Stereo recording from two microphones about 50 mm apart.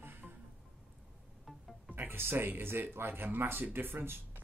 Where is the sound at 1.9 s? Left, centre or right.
Right.